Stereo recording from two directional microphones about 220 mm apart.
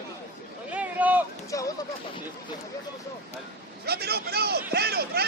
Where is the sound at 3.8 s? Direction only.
45° right (ahead or behind).